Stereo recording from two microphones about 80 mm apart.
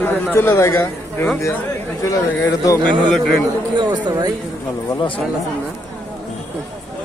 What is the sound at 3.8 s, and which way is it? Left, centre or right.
Speech, right.